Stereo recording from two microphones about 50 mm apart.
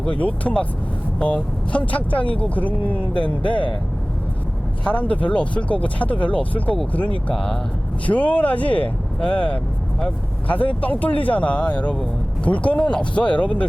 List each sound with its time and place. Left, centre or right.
0.2 s speech: left
1.7 s speech: left
4.8 s speech: left
7.3 s speech: centre
8.0 s speech: left